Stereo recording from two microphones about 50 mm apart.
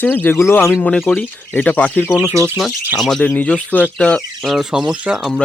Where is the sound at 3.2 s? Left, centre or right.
Left.